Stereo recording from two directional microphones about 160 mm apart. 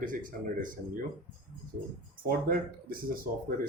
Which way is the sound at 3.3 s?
60° right (ahead or behind).